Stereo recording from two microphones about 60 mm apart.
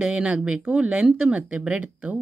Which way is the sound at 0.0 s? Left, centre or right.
Centre.